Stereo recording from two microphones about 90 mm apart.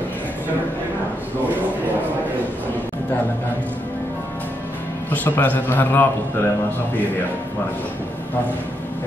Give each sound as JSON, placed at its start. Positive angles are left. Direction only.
{"t": 5.1, "sound": "a man's voice", "side_deg": 20}